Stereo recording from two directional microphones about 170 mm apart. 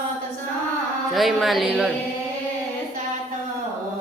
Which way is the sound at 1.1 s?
Centre (ahead or behind).